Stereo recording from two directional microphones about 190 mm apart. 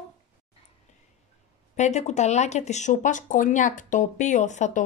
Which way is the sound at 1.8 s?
35° left (ahead or behind).